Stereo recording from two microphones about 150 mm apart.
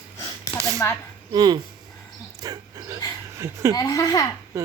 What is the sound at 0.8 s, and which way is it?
Speech, 20° left (ahead or behind).